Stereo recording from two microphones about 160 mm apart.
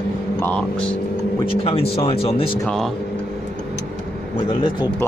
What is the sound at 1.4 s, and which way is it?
Speech, 35° left (ahead or behind).